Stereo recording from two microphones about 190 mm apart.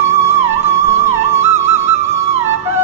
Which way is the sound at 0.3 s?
35° right (ahead or behind).